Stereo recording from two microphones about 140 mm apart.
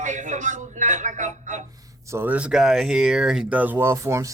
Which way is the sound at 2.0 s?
15° right (ahead or behind).